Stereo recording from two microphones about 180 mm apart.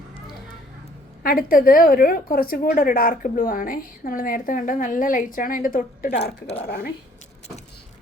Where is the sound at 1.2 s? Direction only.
55° left (ahead or behind).